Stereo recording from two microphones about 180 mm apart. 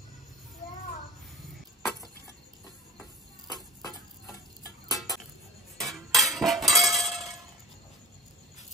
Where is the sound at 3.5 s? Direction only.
20° left (ahead or behind).